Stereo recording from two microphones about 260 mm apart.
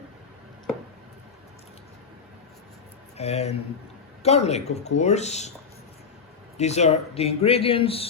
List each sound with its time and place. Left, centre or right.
3.2 s speech: left
6.6 s speech: left